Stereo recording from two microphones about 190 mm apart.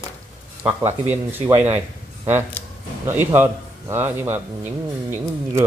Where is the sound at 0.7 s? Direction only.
10° right (ahead or behind).